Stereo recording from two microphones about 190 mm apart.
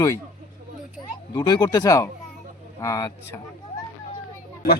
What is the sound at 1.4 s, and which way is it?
Speech, 25° left (ahead or behind).